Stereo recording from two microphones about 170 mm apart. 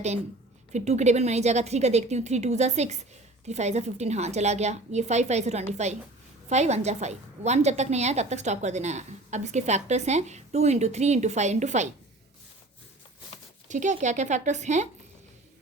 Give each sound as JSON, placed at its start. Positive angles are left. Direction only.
{"t": 0.7, "sound": "a woman's voice", "side_deg": -40}
{"t": 13.7, "sound": "speech", "side_deg": -45}